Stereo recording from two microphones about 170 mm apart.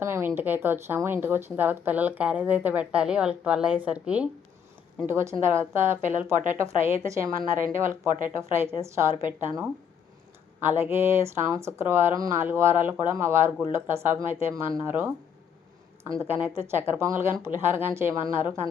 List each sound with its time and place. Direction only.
0.0 s a sound: 15° right (ahead or behind)
0.3 s speech: 10° right (ahead or behind)
10.6 s speech: 10° right (ahead or behind)
16.2 s speech: 10° right (ahead or behind)